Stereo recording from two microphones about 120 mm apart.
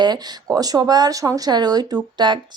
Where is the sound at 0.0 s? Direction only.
35° right (ahead or behind).